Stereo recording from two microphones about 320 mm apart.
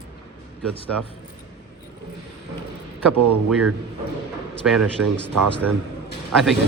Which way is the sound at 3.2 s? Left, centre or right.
Right.